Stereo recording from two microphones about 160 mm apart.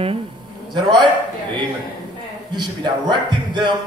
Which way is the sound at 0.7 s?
30° right (ahead or behind).